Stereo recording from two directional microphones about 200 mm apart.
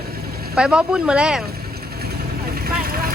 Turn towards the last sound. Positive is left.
turn(degrees=-45)  # may be behind; listen again after turning